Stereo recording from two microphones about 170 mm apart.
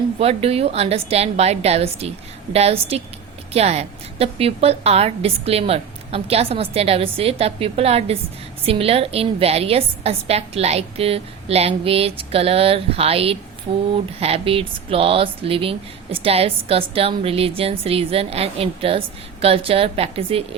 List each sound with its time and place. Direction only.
0.2 s a woman's voice: 35° right (ahead or behind)